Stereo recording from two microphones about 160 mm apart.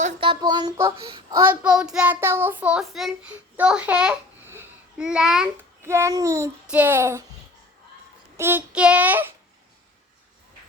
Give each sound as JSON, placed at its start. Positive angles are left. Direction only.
{"t": 0.2, "sound": "child singing", "side_deg": -30}
{"t": 1.4, "sound": "child singing", "side_deg": -10}
{"t": 5.8, "sound": "a child's voice", "side_deg": -15}
{"t": 6.7, "sound": "child singing", "side_deg": -10}
{"t": 8.4, "sound": "child singing", "side_deg": -15}